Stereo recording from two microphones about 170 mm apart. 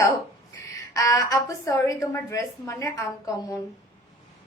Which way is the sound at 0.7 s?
20° left (ahead or behind).